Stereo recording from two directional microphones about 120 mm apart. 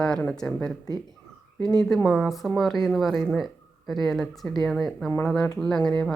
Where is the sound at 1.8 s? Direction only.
5° left (ahead or behind).